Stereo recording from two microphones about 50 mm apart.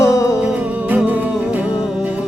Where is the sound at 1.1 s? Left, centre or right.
Right.